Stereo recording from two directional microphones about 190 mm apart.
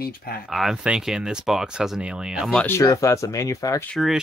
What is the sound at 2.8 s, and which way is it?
Speech, 15° left (ahead or behind).